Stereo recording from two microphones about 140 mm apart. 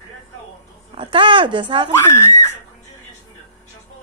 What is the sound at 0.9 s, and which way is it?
Speech, 35° right (ahead or behind).